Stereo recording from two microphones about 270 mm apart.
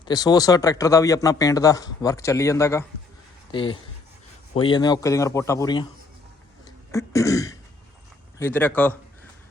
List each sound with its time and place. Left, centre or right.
0.0 s speech: centre
6.7 s throat clearing: centre
8.4 s speech: centre